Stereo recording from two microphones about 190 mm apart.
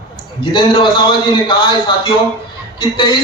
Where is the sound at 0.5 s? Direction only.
25° left (ahead or behind).